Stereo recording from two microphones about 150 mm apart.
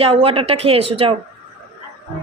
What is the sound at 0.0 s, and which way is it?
A woman's voice, 40° right (ahead or behind).